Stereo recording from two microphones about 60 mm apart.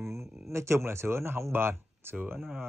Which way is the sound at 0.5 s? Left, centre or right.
Right.